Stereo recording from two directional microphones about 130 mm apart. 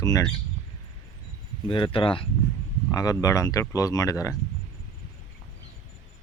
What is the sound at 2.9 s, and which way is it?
Speech, 30° left (ahead or behind).